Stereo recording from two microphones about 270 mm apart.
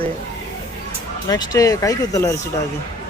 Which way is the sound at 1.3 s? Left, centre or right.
Centre.